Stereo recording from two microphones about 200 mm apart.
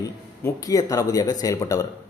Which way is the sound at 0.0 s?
15° left (ahead or behind).